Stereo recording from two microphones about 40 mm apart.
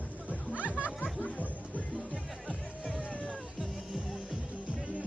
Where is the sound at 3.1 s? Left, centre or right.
Left.